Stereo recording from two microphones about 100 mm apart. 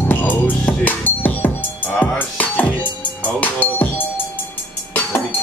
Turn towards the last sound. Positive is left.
turn(degrees=20)  # may be behind; listen again after turning